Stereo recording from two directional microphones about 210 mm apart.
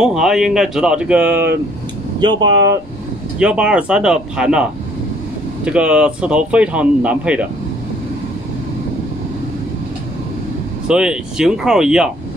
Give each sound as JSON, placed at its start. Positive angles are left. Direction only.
{"t": 0.0, "sound": "speech", "side_deg": 0}
{"t": 2.1, "sound": "speech", "side_deg": -20}
{"t": 3.3, "sound": "speech", "side_deg": -5}
{"t": 5.7, "sound": "speech", "side_deg": -5}
{"t": 10.9, "sound": "speech", "side_deg": -5}